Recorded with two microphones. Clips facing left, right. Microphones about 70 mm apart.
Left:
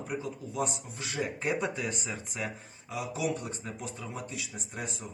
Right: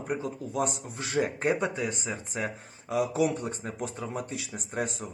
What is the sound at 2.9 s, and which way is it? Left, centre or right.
Speech, right.